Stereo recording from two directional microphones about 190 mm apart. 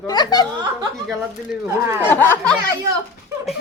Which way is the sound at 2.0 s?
10° left (ahead or behind).